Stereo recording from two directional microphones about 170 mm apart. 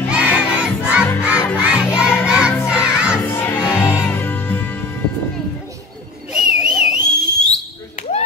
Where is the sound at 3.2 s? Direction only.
15° left (ahead or behind).